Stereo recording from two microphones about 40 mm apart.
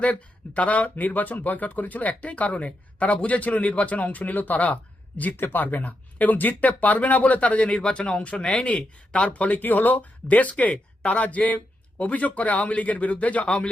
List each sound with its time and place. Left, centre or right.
0.0 s speech: left
0.9 s speech: left
9.6 s speech: left